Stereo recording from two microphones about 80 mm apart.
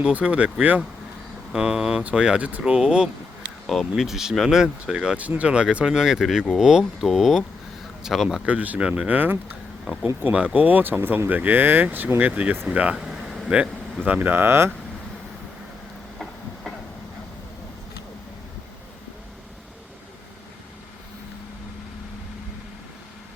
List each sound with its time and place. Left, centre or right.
0.0 s speech: centre
3.7 s speech: centre
8.4 s speech: centre